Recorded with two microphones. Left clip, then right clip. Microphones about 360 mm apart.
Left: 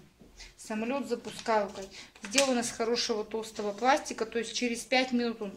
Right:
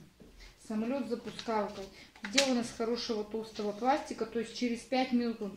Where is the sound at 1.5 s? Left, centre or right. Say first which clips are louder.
Left 6 dB; left.